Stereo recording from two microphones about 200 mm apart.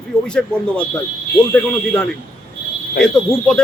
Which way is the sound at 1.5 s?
5° left (ahead or behind).